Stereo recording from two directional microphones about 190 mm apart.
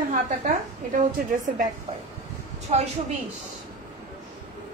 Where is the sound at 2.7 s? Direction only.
35° right (ahead or behind).